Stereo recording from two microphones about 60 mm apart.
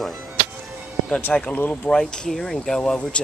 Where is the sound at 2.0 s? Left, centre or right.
Centre.